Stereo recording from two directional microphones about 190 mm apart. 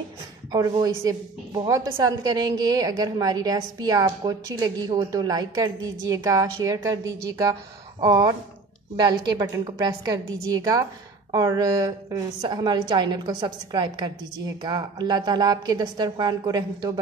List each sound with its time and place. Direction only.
0.5 s a woman's voice: 20° right (ahead or behind)
10.5 s a woman's voice: 20° right (ahead or behind)